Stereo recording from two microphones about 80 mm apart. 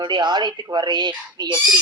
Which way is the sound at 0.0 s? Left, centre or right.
Right.